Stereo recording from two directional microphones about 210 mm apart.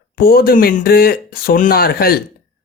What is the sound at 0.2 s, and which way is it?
Speech, 45° left (ahead or behind).